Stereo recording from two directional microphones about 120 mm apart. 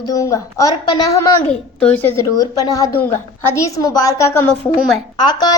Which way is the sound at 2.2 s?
30° left (ahead or behind).